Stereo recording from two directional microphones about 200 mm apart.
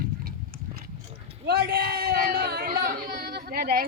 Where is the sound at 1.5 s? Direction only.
50° right (ahead or behind).